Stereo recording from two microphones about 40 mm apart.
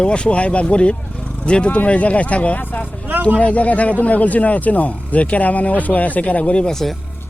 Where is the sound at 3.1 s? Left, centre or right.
Right.